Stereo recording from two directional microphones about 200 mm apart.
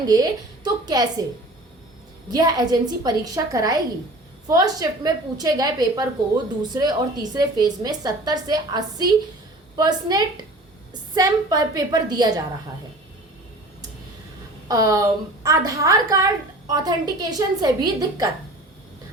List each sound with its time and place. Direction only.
0.1 s a woman's voice: 20° right (ahead or behind)
2.3 s a woman's voice: 20° right (ahead or behind)
14.7 s a woman's voice: 15° right (ahead or behind)